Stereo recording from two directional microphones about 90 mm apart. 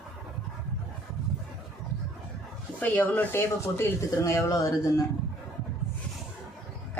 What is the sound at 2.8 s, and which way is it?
Speech, 20° left (ahead or behind).